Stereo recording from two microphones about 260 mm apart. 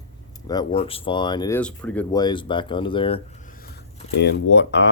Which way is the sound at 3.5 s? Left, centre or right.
Left.